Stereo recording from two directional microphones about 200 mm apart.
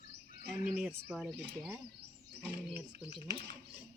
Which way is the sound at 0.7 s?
10° right (ahead or behind).